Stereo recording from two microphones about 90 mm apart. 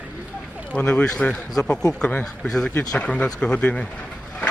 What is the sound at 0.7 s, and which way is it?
Speech, 15° left (ahead or behind).